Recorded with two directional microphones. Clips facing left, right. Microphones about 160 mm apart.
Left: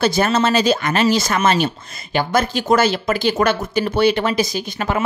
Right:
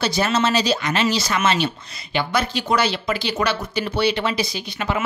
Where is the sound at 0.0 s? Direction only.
50° left (ahead or behind).